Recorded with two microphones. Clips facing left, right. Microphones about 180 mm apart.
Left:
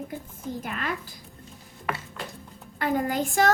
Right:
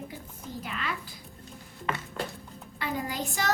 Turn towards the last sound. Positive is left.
turn(degrees=50)  # may be behind; listen again after turning